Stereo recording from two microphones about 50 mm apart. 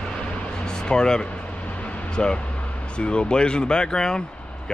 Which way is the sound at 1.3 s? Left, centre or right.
Left.